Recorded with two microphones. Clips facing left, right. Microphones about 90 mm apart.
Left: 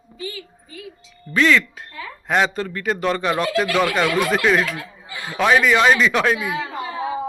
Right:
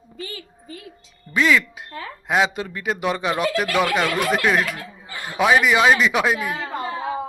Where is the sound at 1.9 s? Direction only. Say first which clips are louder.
Right 1 dB; 45° right (ahead or behind).